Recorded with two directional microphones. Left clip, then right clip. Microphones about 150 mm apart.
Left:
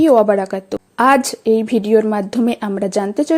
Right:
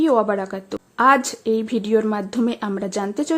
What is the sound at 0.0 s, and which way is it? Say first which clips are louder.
A woman's voice: left 7 dB; 25° left (ahead or behind).